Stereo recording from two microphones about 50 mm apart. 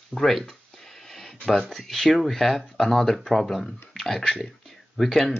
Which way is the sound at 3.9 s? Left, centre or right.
Centre.